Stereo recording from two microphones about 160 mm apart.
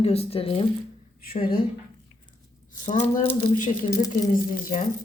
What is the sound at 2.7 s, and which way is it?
Speech, 50° left (ahead or behind).